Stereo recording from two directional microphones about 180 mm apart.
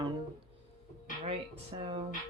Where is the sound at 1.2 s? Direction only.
30° right (ahead or behind).